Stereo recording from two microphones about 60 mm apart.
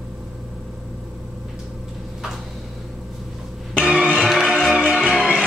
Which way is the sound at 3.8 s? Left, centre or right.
Centre.